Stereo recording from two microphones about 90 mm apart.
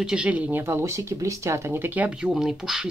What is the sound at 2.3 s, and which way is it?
Speech, 5° right (ahead or behind).